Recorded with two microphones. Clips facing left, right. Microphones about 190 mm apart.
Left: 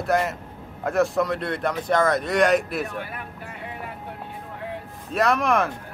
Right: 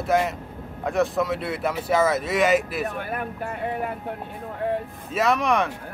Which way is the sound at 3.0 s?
50° right (ahead or behind).